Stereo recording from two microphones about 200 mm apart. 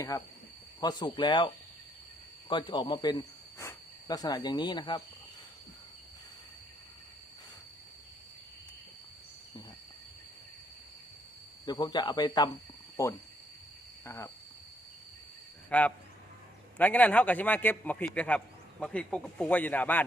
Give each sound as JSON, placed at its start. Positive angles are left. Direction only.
{"t": 0.1, "sound": "a man's voice", "side_deg": 15}
{"t": 2.5, "sound": "cricket", "side_deg": 25}
{"t": 11.6, "sound": "a man's voice", "side_deg": 20}
{"t": 15.7, "sound": "a man's voice", "side_deg": 5}